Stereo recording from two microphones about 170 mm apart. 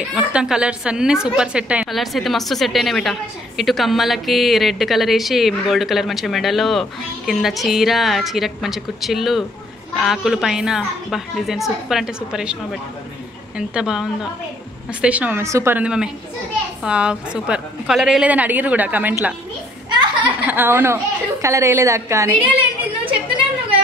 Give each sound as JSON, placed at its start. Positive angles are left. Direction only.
{"t": 0.1, "sound": "a woman's voice", "side_deg": -5}
{"t": 13.6, "sound": "a woman's voice", "side_deg": -5}
{"t": 19.9, "sound": "a sound", "side_deg": -25}
{"t": 20.4, "sound": "a woman's voice", "side_deg": -10}